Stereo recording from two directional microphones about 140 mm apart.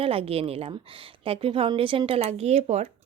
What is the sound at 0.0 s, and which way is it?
Speech, 45° right (ahead or behind).